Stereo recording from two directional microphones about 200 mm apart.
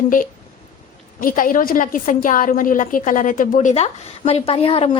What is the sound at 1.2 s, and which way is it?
A woman's voice, 45° left (ahead or behind).